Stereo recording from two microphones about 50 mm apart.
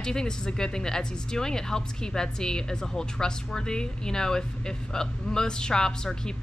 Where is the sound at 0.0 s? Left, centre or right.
Centre.